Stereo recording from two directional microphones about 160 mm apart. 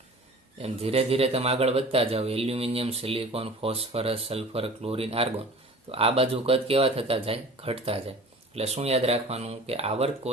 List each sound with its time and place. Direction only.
0.6 s speech: 40° right (ahead or behind)